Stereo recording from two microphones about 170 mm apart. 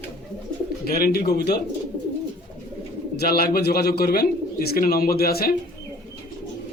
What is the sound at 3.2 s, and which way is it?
Speech, 65° left (ahead or behind).